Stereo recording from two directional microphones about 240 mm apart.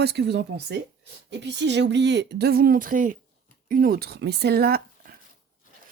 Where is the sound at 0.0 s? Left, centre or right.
Right.